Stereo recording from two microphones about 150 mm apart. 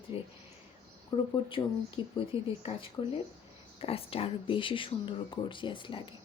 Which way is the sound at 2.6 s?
40° left (ahead or behind).